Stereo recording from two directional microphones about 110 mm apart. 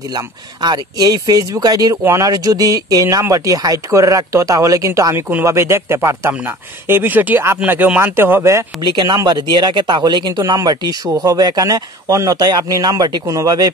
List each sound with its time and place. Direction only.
0.1 s speech: 40° right (ahead or behind); by 8.6 s 25° right (ahead or behind)
8.8 s speech: 40° right (ahead or behind)